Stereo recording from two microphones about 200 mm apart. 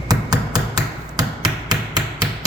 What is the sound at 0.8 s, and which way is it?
Hammer, 20° right (ahead or behind).